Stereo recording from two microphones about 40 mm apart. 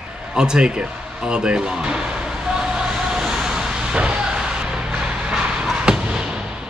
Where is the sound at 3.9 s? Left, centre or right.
Right.